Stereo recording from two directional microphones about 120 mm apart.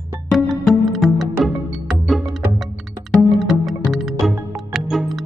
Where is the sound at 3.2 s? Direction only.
Centre (ahead or behind).